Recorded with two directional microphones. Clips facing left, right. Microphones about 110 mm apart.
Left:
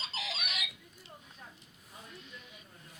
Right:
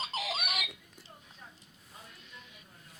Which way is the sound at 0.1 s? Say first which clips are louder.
Right 5 dB; 50° right (ahead or behind).